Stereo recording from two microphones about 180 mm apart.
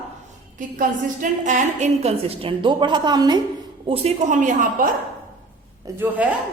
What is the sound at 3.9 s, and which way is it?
A woman's voice, 40° right (ahead or behind).